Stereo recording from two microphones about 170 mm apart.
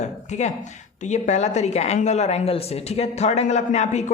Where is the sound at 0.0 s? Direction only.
40° left (ahead or behind).